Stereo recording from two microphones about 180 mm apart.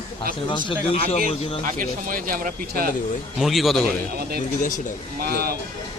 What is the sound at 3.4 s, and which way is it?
Speech, centre (ahead or behind).